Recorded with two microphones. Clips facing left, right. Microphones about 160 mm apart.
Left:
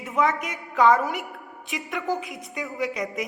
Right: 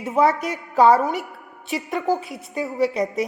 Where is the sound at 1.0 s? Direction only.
Centre (ahead or behind).